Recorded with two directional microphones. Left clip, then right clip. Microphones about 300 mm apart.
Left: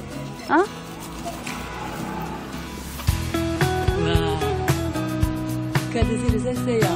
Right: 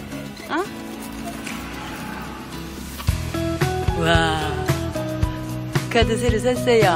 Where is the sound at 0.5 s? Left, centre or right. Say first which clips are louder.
Left 6 dB; centre.